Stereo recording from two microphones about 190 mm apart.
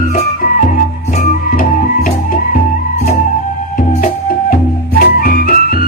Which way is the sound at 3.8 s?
45° left (ahead or behind).